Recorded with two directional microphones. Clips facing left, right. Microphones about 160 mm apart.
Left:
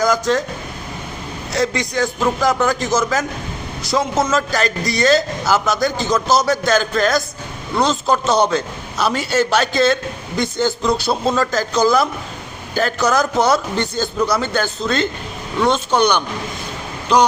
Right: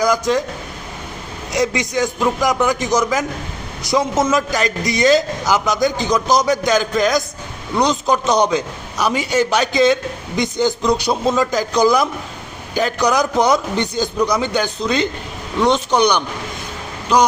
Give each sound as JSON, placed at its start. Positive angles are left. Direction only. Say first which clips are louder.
{"t": 0.0, "sound": "speech", "louder": "even", "side_deg": -15}
{"t": 1.5, "sound": "a man's voice", "louder": "right 1 dB", "side_deg": -20}